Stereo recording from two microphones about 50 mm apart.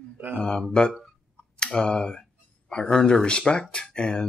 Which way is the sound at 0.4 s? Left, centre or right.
Centre.